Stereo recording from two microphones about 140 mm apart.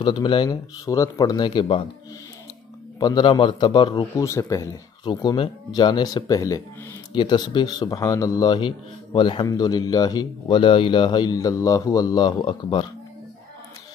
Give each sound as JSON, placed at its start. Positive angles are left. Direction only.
{"t": 0.0, "sound": "speech", "side_deg": 35}
{"t": 0.8, "sound": "speech", "side_deg": 25}
{"t": 3.0, "sound": "speech", "side_deg": 30}
{"t": 4.2, "sound": "speech", "side_deg": 20}
{"t": 5.0, "sound": "speech", "side_deg": 30}